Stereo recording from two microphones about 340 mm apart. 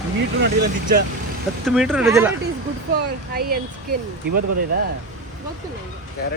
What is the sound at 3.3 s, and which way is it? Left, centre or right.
Speech, right.